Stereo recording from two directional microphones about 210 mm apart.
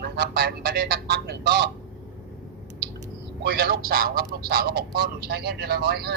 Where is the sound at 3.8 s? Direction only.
45° right (ahead or behind).